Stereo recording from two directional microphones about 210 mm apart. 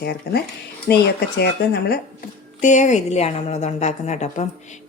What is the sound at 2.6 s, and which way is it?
Speech, 35° left (ahead or behind).